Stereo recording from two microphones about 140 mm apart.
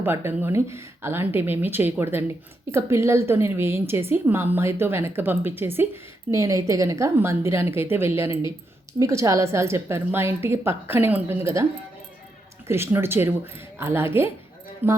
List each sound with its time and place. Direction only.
0.0 s a woman's voice: 15° right (ahead or behind)
12.6 s a woman's voice: 15° right (ahead or behind)